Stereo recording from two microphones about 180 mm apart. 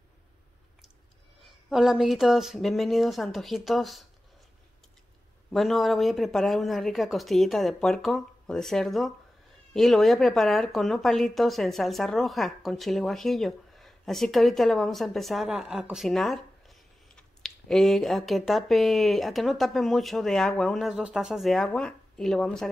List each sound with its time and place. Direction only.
1.7 s a woman's voice: centre (ahead or behind)
5.5 s a woman's voice: centre (ahead or behind)